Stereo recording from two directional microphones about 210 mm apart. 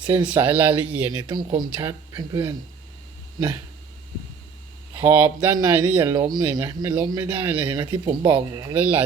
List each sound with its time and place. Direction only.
0.3 s speech: 5° right (ahead or behind)
1.1 s speech: 20° right (ahead or behind)
4.9 s speech: 10° right (ahead or behind)
7.7 s speech: 20° right (ahead or behind)